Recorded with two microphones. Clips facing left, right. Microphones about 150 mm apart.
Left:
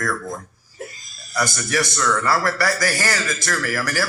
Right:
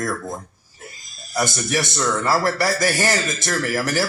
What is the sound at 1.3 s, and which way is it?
A man's voice, 20° right (ahead or behind).